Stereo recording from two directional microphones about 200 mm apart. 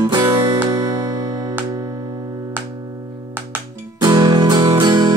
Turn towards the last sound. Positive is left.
turn(degrees=-20)  # may be behind; listen again after turning